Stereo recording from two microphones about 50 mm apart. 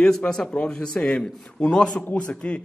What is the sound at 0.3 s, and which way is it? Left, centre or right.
A man's voice, centre.